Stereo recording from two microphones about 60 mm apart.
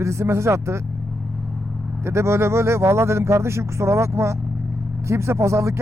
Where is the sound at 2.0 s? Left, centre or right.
Right.